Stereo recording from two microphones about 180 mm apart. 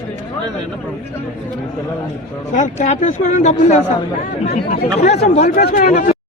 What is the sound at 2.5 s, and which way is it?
Speech, 45° left (ahead or behind).